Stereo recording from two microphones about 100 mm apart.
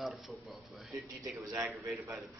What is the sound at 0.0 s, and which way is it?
Speech, centre (ahead or behind).